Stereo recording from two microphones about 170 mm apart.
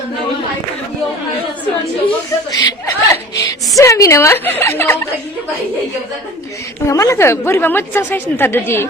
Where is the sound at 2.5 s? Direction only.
20° left (ahead or behind).